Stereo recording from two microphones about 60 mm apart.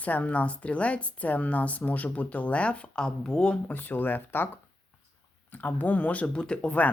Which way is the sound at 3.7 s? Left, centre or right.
Left.